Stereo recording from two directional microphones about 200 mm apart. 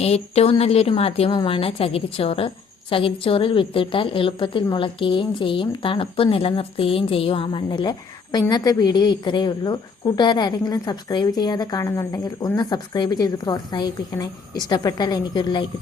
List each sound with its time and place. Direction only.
0.0 s a woman's voice: 30° left (ahead or behind)